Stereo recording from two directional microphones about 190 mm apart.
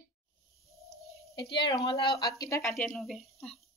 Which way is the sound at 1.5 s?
25° left (ahead or behind).